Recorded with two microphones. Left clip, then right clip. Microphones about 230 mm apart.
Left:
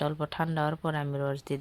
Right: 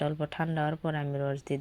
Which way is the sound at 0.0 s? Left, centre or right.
Centre.